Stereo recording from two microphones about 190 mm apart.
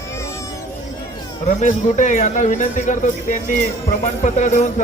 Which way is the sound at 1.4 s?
40° left (ahead or behind).